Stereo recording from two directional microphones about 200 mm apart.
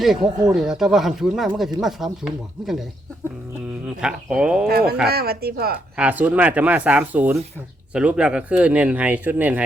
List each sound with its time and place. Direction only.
0.0 s speech: centre (ahead or behind)
3.8 s speech: 5° right (ahead or behind)
4.7 s a woman's voice: 50° right (ahead or behind)
6.0 s speech: 5° right (ahead or behind)